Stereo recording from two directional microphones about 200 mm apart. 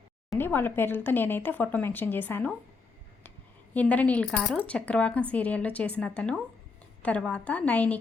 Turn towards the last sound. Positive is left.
turn(degrees=5)  # may be behind; listen again after turning